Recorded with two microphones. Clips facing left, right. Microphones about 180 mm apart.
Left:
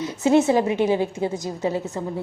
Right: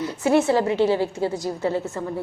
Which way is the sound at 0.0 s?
20° left (ahead or behind).